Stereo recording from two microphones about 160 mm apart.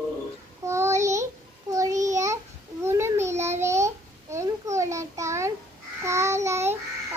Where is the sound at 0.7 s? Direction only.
20° right (ahead or behind).